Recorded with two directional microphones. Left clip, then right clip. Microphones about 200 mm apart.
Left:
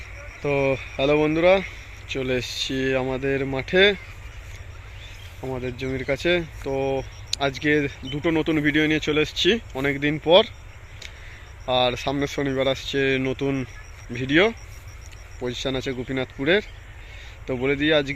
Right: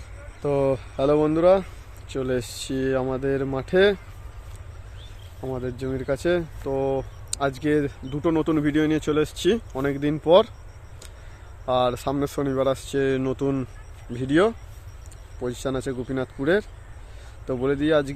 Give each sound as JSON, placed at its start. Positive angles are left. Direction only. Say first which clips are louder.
{"t": 0.4, "sound": "speech", "louder": "even", "side_deg": -10}
{"t": 5.4, "sound": "speech", "louder": "even", "side_deg": -5}
{"t": 11.6, "sound": "speech", "louder": "left 1 dB", "side_deg": -10}
{"t": 15.5, "sound": "speech", "louder": "left 2 dB", "side_deg": -15}